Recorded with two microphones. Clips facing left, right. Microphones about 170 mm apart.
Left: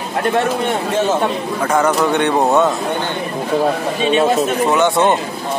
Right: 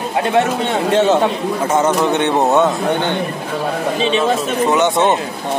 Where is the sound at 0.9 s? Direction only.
65° right (ahead or behind).